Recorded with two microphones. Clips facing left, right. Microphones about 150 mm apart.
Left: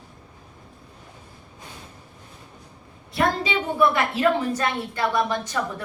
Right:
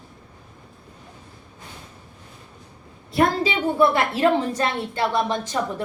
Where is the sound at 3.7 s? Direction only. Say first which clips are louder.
Right 1 dB; 30° right (ahead or behind).